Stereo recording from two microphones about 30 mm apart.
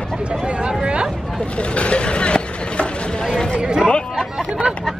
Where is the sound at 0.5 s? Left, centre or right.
Right.